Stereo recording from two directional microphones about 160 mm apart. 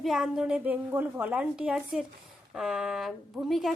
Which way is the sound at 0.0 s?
Centre (ahead or behind).